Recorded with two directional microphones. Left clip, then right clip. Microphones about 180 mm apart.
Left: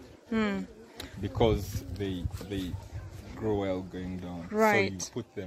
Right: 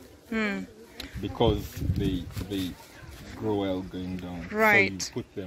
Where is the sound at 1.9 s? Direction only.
10° right (ahead or behind).